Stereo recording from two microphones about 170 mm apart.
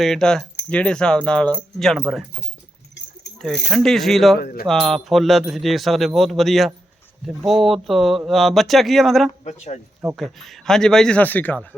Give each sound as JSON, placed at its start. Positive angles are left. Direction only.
{"t": 0.0, "sound": "speech", "side_deg": 5}
{"t": 3.3, "sound": "speech", "side_deg": 0}
{"t": 4.4, "sound": "speech", "side_deg": 65}
{"t": 4.6, "sound": "speech", "side_deg": 0}
{"t": 9.4, "sound": "speech", "side_deg": 40}
{"t": 10.2, "sound": "speech", "side_deg": 0}